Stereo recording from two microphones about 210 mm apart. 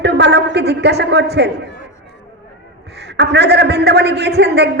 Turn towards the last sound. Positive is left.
turn(degrees=-50)  # may be behind; listen again after turning